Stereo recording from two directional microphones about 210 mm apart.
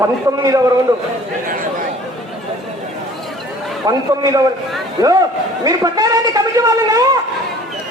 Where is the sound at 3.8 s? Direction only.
15° right (ahead or behind).